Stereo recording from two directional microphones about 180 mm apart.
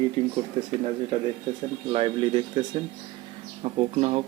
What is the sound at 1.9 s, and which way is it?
Speech, 30° right (ahead or behind).